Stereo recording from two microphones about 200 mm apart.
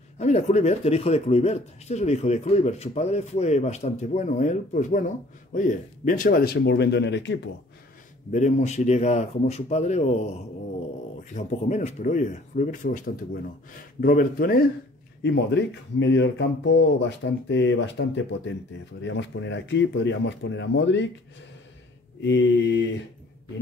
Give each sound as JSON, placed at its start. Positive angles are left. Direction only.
{"t": 0.2, "sound": "speech", "side_deg": 35}
{"t": 8.3, "sound": "speech", "side_deg": 35}
{"t": 11.3, "sound": "speech", "side_deg": 35}
{"t": 15.2, "sound": "speech", "side_deg": 60}
{"t": 22.2, "sound": "speech", "side_deg": 60}